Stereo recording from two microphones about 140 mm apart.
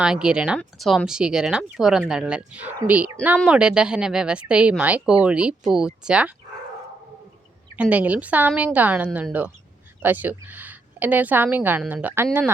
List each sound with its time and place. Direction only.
0.0 s speech: 5° right (ahead or behind)
7.8 s a woman's voice: 10° right (ahead or behind)